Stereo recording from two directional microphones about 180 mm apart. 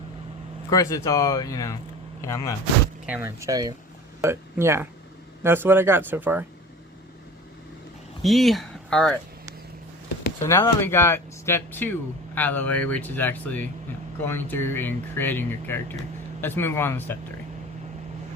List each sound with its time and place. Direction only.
0.7 s speech: 20° left (ahead or behind)
3.1 s speech: 15° right (ahead or behind)
8.2 s speech: centre (ahead or behind)
10.4 s speech: 15° left (ahead or behind)